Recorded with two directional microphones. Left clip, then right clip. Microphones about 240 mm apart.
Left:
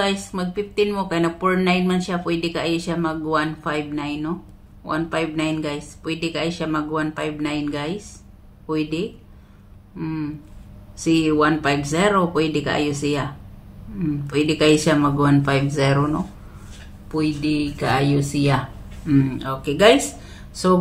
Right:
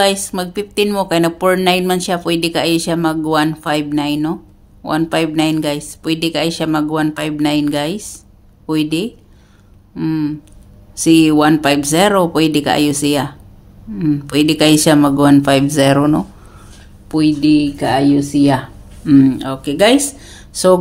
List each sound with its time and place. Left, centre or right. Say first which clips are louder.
0.0 s speech: right 8 dB; right
19.0 s speech: right 9 dB; right